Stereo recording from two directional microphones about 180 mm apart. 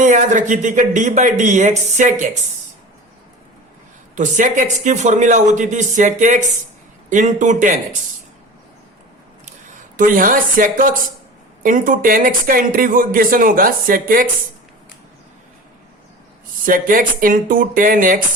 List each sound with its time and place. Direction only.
0.0 s speech: 45° right (ahead or behind)
4.1 s speech: 45° right (ahead or behind)
10.0 s speech: 50° right (ahead or behind)
16.6 s speech: 50° right (ahead or behind)